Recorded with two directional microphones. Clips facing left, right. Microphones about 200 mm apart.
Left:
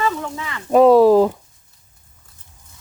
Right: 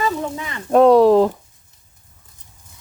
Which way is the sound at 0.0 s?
20° right (ahead or behind).